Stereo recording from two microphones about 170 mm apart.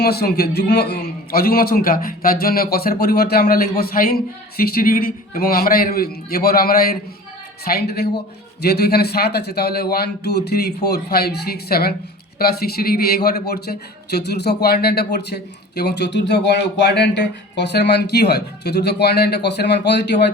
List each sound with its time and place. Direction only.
0.0 s a man's voice: 70° left (ahead or behind)